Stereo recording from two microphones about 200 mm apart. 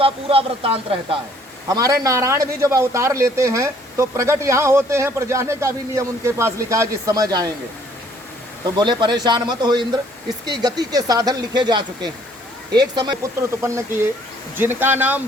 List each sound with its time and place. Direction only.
0.0 s speech: 30° right (ahead or behind)
1.6 s a man's voice: 20° right (ahead or behind)
8.7 s a man's voice: 20° right (ahead or behind)